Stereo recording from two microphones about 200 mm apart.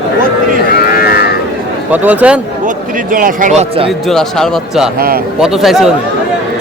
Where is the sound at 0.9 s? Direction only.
50° left (ahead or behind).